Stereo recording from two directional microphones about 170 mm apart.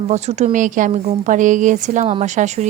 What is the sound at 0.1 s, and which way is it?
A woman's voice, 40° right (ahead or behind).